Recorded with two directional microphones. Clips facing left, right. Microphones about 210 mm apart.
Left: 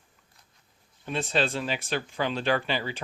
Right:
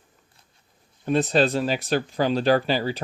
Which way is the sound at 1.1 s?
40° right (ahead or behind).